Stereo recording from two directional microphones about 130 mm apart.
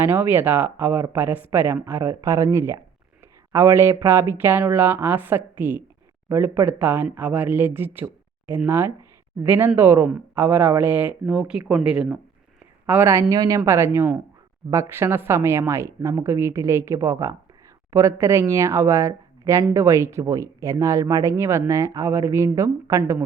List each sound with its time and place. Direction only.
0.0 s speech: 15° right (ahead or behind)
12.8 s speech: 20° right (ahead or behind)